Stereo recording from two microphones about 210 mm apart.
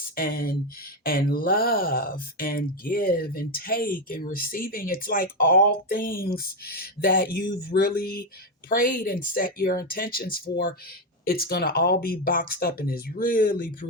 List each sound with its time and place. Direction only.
0.2 s speech: 45° left (ahead or behind)